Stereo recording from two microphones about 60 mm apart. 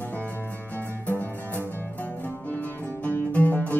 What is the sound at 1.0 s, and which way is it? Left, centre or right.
Music, left.